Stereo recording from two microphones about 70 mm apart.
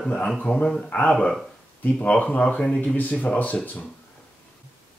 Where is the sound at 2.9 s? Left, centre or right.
Left.